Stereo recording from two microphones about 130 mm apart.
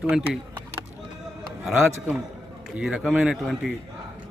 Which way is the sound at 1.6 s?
Centre (ahead or behind).